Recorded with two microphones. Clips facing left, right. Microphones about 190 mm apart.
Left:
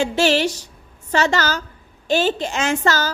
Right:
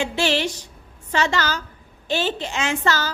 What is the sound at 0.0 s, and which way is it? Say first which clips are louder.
A woman's voice: left 4 dB; 40° left (ahead or behind).